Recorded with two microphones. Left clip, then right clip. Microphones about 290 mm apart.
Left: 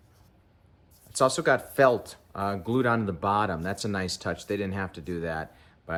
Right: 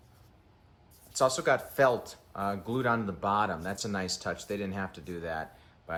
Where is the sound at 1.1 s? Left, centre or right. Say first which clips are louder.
Left 3 dB; left.